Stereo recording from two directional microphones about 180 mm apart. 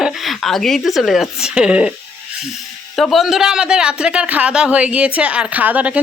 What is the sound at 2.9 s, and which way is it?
A man's voice, centre (ahead or behind).